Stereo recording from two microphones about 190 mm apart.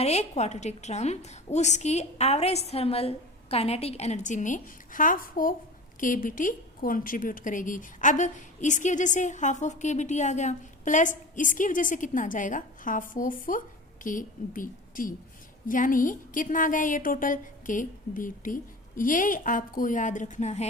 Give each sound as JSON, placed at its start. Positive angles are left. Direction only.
{"t": 0.0, "sound": "a woman's voice", "side_deg": 35}